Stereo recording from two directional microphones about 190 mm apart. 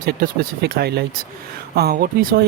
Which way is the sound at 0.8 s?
55° right (ahead or behind).